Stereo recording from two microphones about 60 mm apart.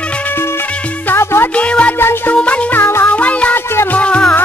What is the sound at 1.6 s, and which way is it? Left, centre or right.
Music, left.